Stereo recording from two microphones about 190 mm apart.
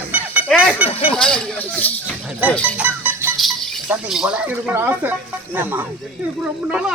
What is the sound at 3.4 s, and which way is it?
Speech, centre (ahead or behind).